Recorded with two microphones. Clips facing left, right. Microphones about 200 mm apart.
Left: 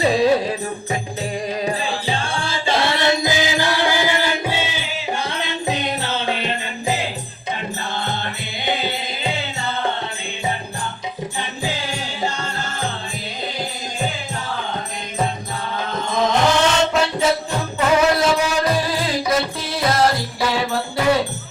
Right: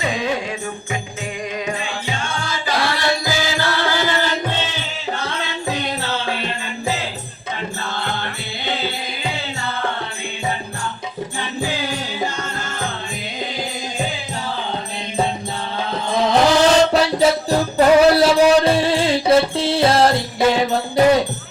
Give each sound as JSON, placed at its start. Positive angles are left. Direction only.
{"t": 0.0, "sound": "music", "side_deg": 35}
{"t": 1.6, "sound": "music", "side_deg": 35}
{"t": 16.0, "sound": "music", "side_deg": -35}